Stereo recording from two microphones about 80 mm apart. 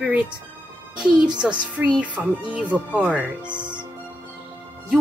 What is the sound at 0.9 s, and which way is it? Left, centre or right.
Speech, centre.